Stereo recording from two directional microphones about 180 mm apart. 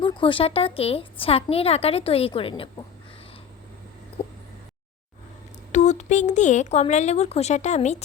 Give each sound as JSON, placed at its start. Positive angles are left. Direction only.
{"t": 0.0, "sound": "a woman's voice", "side_deg": 25}
{"t": 5.7, "sound": "a woman's voice", "side_deg": 40}